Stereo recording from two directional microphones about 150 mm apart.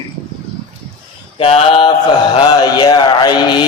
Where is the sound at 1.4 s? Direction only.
40° left (ahead or behind).